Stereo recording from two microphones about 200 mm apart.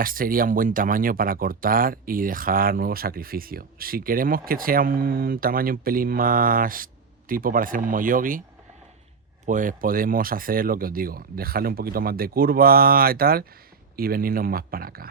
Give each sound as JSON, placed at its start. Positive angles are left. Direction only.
{"t": 0.0, "sound": "speech", "side_deg": -45}
{"t": 9.5, "sound": "speech", "side_deg": -40}